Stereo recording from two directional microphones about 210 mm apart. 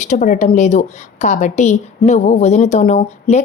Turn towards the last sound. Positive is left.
turn(degrees=30)  # may be behind; listen again after turning